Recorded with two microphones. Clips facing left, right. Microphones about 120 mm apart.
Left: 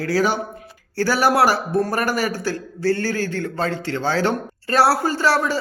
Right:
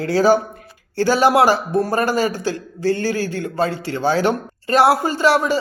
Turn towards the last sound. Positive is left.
turn(degrees=-15)  # may be behind; listen again after turning